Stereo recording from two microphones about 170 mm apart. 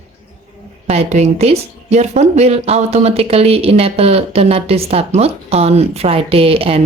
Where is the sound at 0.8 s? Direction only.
40° right (ahead or behind).